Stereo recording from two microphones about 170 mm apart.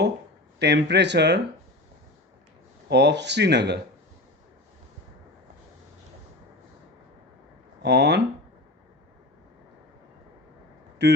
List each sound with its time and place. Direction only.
0.6 s speech: 85° right
2.9 s speech: 90° right
7.8 s speech: 80° right
11.0 s speech: 80° right